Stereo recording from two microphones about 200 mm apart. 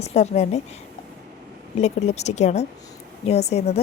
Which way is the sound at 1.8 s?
35° left (ahead or behind).